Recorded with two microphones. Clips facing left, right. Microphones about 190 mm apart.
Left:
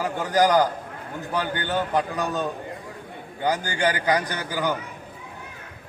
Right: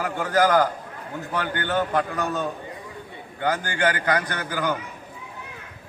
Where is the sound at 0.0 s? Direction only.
15° left (ahead or behind).